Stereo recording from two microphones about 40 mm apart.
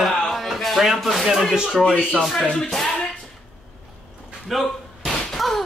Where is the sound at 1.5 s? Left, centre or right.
Centre.